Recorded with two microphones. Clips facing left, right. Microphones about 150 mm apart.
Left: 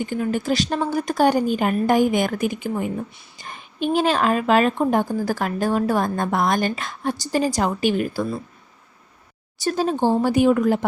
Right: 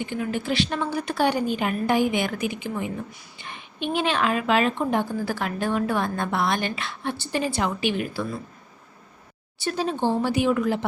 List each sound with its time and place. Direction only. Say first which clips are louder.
0.0 s a woman's voice: left 4 dB; 40° left (ahead or behind)
9.6 s a woman's voice: left 4 dB; 40° left (ahead or behind)